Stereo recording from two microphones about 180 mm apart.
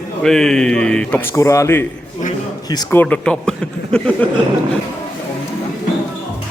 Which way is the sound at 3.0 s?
5° left (ahead or behind).